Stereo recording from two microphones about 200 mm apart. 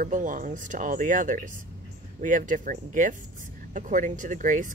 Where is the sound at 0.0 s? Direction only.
40° right (ahead or behind).